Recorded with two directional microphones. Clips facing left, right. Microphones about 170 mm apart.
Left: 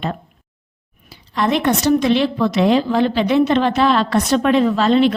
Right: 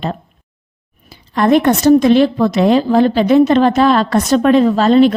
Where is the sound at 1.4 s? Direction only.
50° right (ahead or behind).